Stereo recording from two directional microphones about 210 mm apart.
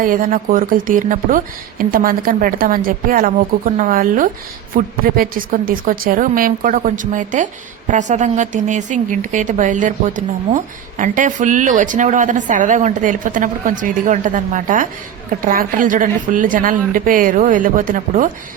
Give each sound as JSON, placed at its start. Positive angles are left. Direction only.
{"t": 0.0, "sound": "a woman's voice", "side_deg": -40}